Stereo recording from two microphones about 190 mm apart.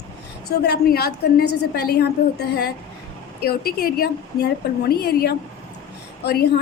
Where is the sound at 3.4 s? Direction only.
55° left (ahead or behind).